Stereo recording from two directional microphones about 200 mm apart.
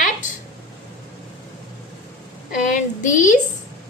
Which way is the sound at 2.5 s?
40° left (ahead or behind).